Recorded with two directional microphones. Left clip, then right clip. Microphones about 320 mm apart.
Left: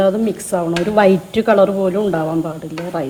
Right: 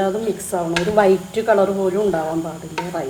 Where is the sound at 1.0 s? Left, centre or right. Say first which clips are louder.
Left 3 dB; left.